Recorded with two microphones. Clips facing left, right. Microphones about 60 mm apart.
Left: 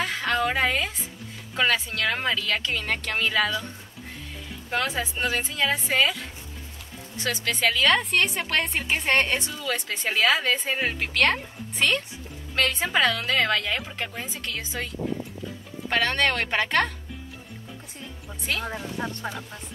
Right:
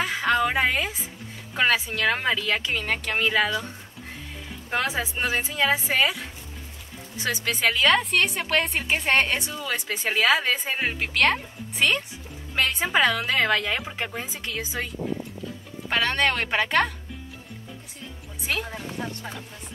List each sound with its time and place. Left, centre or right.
0.0 s music: centre
1.5 s a woman's voice: centre
9.6 s speech: centre
15.9 s a woman's voice: centre